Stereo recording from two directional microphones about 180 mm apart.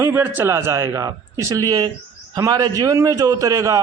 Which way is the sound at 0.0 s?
10° right (ahead or behind).